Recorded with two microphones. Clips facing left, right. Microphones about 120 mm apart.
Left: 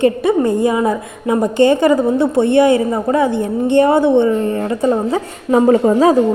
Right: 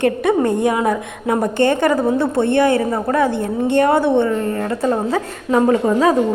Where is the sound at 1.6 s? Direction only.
15° left (ahead or behind).